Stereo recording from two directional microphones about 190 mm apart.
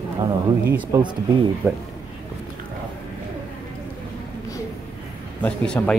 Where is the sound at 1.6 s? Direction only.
5° right (ahead or behind).